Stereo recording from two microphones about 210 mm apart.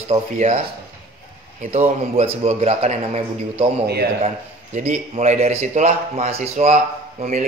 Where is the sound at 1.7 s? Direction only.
30° right (ahead or behind).